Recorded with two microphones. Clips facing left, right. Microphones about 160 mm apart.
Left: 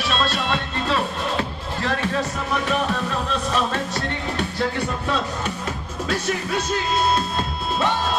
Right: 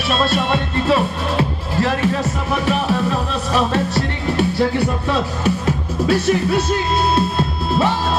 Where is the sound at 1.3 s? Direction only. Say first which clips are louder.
Right 6 dB; 5° right (ahead or behind).